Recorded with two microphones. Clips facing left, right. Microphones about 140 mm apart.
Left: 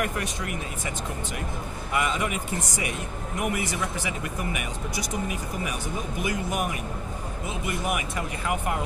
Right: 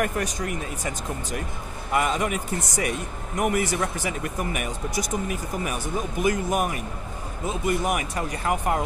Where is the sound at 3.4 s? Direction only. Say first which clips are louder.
Right 5 dB; 45° right (ahead or behind).